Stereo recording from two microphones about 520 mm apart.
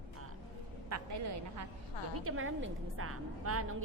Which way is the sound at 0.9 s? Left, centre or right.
Right.